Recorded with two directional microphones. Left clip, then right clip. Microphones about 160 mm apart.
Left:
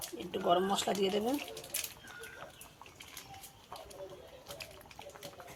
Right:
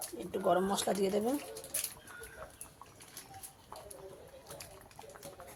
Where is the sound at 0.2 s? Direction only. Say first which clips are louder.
Even; 15° right (ahead or behind).